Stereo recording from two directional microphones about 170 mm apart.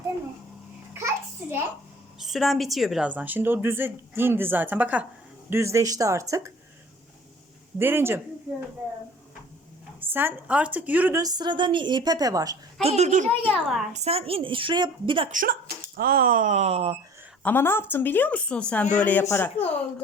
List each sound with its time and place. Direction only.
0.9 s a sound: 15° right (ahead or behind)
2.1 s a woman's voice: centre (ahead or behind); by 6.5 s 20° right (ahead or behind)
7.8 s a woman's voice: 15° right (ahead or behind)
10.1 s a woman's voice: 10° right (ahead or behind)
11.2 s a woman's voice: 25° right (ahead or behind)
12.8 s a woman's voice: 40° right (ahead or behind)
13.4 s speech: 10° left (ahead or behind)
13.9 s a woman's voice: 35° right (ahead or behind)
15.3 s speech: 55° right (ahead or behind); by 16.9 s 35° right (ahead or behind)
17.4 s speech: 10° left (ahead or behind)